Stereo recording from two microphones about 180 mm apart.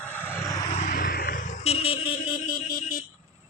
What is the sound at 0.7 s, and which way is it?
Vehicle, 45° left (ahead or behind).